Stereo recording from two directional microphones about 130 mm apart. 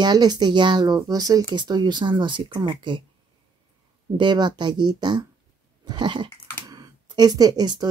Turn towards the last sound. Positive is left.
turn(degrees=-35)  # may be behind; listen again after turning